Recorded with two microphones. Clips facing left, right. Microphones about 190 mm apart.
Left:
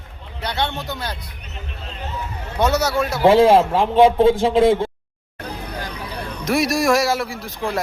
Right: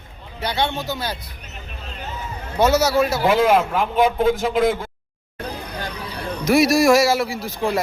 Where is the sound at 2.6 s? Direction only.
5° right (ahead or behind).